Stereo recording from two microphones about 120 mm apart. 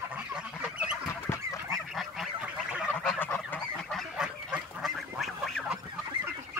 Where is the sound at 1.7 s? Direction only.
Centre (ahead or behind).